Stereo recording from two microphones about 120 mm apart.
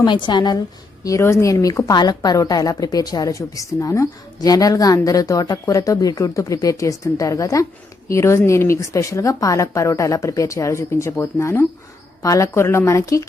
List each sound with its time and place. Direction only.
0.0 s a woman's voice: 40° left (ahead or behind)
1.0 s a woman's voice: 25° left (ahead or behind)